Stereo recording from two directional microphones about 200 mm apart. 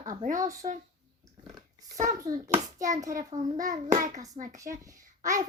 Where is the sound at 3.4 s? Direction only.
35° right (ahead or behind).